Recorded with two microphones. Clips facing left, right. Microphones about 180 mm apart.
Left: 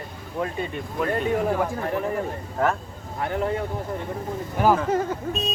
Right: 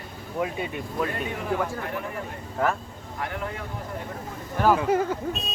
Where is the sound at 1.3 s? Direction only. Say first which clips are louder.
Left 5 dB; 40° left (ahead or behind).